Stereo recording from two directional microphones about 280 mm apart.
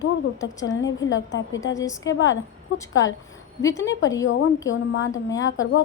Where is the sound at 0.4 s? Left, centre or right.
Left.